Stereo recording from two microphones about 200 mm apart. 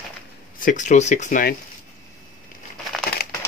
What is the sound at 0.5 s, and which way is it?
Speech, 40° left (ahead or behind).